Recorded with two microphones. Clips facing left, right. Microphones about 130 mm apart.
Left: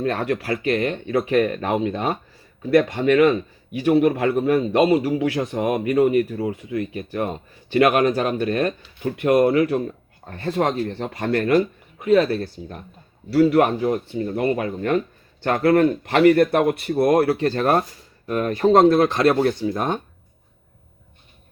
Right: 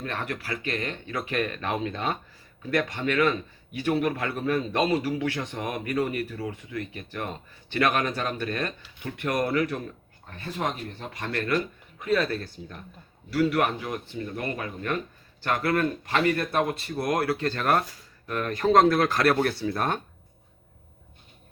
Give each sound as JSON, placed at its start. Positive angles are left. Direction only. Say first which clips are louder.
{"t": 0.0, "sound": "speech", "louder": "left 10 dB", "side_deg": 40}
{"t": 10.4, "sound": "speech", "louder": "left 9 dB", "side_deg": 70}
{"t": 11.3, "sound": "speech", "louder": "left 9 dB", "side_deg": 40}
{"t": 16.4, "sound": "speech", "louder": "left 9 dB", "side_deg": 65}
{"t": 16.9, "sound": "speech", "louder": "left 11 dB", "side_deg": 30}